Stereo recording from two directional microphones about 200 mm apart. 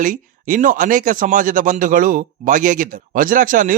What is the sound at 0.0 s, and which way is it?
Speech, 40° right (ahead or behind).